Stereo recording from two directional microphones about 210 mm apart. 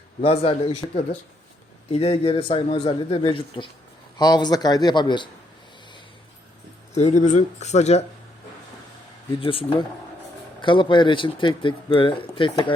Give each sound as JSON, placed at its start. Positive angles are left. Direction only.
{"t": 0.2, "sound": "speech", "side_deg": 25}
{"t": 6.9, "sound": "speech", "side_deg": 35}
{"t": 9.4, "sound": "speech", "side_deg": 25}